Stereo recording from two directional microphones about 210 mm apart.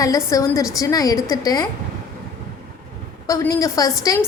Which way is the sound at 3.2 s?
15° left (ahead or behind).